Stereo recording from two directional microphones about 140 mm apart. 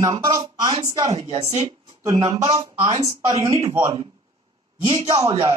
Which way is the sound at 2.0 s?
30° right (ahead or behind).